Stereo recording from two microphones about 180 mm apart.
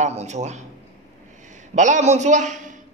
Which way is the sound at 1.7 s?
40° right (ahead or behind).